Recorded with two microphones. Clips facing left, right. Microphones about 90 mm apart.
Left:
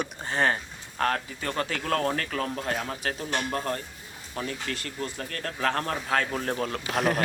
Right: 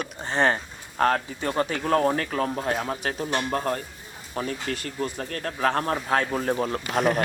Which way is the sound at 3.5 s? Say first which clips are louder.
Right 4 dB; 30° right (ahead or behind).